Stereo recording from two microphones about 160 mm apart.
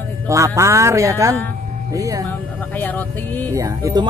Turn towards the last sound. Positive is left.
turn(degrees=-20)  # may be behind; listen again after turning